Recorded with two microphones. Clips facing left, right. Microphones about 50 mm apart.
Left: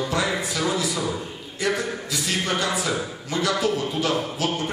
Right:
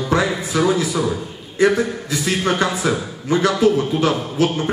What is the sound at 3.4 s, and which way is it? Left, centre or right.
Speech, right.